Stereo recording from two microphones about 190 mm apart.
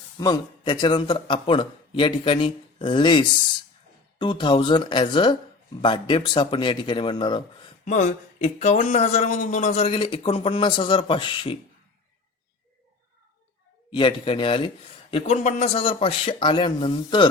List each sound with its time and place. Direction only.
0.2 s a man's voice: 20° left (ahead or behind)
7.9 s speech: 40° left (ahead or behind)
13.9 s a man's voice: 25° left (ahead or behind)